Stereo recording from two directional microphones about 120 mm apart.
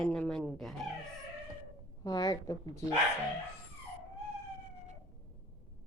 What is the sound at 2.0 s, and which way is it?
Speech, 30° left (ahead or behind).